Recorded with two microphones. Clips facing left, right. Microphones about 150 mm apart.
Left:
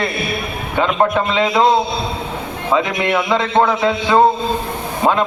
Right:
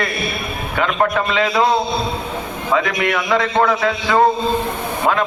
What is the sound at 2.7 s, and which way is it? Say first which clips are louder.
A man's voice: left 2 dB; 25° left (ahead or behind).